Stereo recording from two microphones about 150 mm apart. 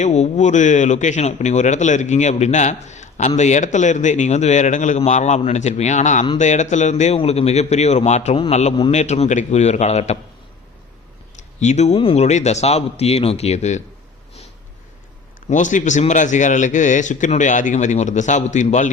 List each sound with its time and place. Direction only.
0.0 s speech: 50° left (ahead or behind)
11.6 s speech: 50° left (ahead or behind)
15.4 s a man's voice: 55° left (ahead or behind)